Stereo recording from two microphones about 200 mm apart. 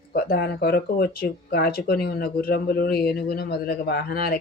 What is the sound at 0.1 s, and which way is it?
Speech, 50° left (ahead or behind).